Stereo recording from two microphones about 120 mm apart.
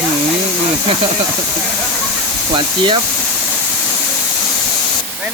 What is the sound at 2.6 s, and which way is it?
Speech, 45° right (ahead or behind).